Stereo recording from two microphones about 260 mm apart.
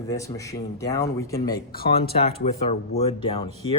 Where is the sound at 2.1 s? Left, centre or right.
Left.